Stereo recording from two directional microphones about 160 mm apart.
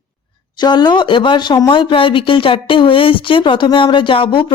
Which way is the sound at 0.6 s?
25° left (ahead or behind).